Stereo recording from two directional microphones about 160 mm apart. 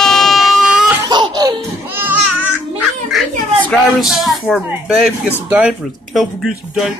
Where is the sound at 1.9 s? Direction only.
10° right (ahead or behind).